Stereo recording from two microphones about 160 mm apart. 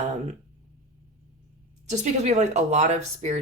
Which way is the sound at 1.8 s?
45° right (ahead or behind).